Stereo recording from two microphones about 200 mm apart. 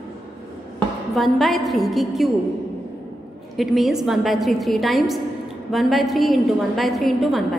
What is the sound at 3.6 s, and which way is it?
A woman's voice, centre (ahead or behind).